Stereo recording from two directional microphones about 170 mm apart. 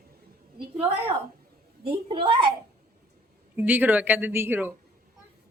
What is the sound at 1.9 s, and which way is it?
Speech, 30° right (ahead or behind).